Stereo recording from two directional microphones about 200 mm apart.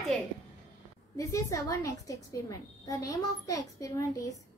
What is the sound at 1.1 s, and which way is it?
A woman's voice, 15° left (ahead or behind).